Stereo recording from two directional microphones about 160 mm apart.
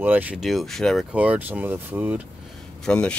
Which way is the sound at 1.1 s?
10° right (ahead or behind).